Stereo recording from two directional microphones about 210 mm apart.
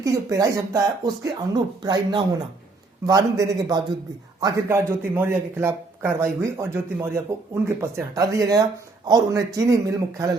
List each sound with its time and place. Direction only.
0.0 s speech: 15° right (ahead or behind)